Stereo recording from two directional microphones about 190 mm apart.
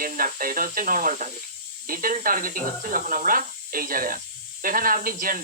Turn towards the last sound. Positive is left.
turn(degrees=-45)  # may be behind; listen again after turning